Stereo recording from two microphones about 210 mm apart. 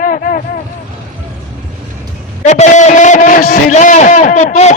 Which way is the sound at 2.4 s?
35° left (ahead or behind).